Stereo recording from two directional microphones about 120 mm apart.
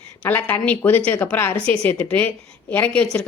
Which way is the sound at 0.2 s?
15° left (ahead or behind).